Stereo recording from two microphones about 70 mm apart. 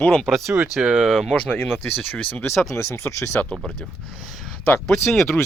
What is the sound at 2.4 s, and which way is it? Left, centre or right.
Speech, left.